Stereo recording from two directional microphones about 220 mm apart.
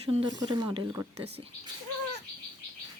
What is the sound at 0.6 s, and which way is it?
Speech, 15° right (ahead or behind).